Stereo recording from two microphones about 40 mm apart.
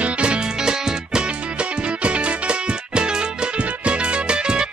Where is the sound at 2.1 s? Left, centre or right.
Right.